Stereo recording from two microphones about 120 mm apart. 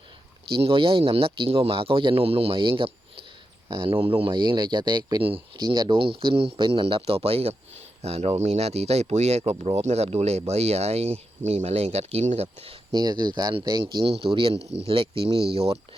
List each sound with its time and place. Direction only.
0.6 s a man's voice: 45° right (ahead or behind)
12.9 s a man's voice: 35° right (ahead or behind); by 15.8 s 60° right (ahead or behind)